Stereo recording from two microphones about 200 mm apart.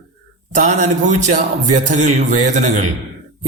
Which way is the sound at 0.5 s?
35° right (ahead or behind).